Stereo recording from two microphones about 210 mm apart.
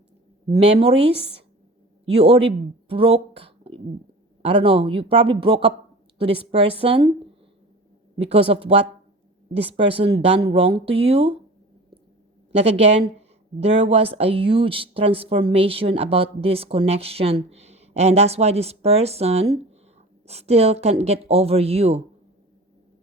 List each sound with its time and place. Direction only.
0.6 s speech: 25° right (ahead or behind)
2.9 s speech: 25° right (ahead or behind)
8.2 s speech: 25° right (ahead or behind)
12.5 s speech: 30° right (ahead or behind)